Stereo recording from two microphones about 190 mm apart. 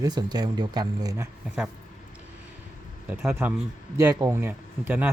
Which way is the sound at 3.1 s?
10° right (ahead or behind).